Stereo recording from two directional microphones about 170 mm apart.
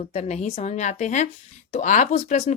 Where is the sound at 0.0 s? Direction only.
40° left (ahead or behind).